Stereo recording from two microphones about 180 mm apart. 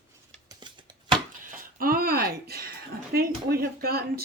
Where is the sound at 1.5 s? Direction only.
55° right (ahead or behind).